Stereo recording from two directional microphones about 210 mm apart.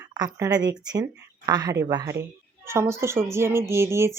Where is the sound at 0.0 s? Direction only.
20° right (ahead or behind).